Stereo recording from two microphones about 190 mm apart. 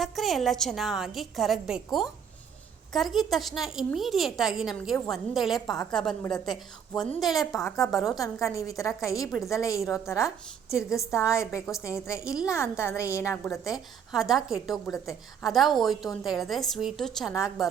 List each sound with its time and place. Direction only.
0.0 s a woman's voice: centre (ahead or behind)
8.2 s a woman's voice: 15° left (ahead or behind)
10.7 s a woman's voice: 5° right (ahead or behind)
11.0 s a woman's voice: 15° left (ahead or behind)
11.6 s a woman's voice: centre (ahead or behind)
12.8 s a woman's voice: 15° left (ahead or behind)
14.1 s a woman's voice: centre (ahead or behind)